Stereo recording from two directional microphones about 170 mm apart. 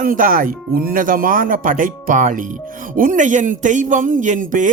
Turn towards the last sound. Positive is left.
turn(degrees=-50)  # may be behind; listen again after turning